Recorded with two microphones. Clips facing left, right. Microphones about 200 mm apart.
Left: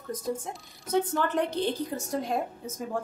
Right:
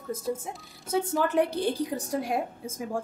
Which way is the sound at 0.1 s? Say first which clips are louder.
Right 1 dB; 5° right (ahead or behind).